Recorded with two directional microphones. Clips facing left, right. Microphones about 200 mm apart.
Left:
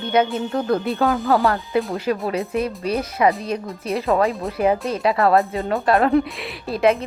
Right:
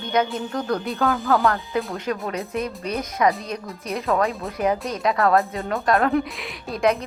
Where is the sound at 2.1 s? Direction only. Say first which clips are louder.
Left 4 dB; 15° left (ahead or behind).